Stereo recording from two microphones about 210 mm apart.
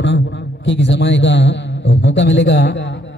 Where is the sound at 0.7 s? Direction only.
60° left (ahead or behind).